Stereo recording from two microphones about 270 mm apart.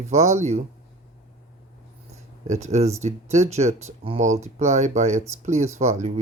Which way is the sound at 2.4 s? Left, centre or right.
Right.